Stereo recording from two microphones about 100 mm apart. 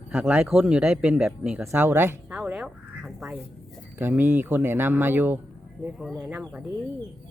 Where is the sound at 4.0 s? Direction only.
20° right (ahead or behind).